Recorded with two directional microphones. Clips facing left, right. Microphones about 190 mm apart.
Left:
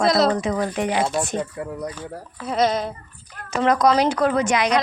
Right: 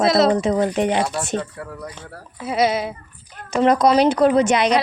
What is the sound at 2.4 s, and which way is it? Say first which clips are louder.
Speech: right 1 dB; 10° right (ahead or behind).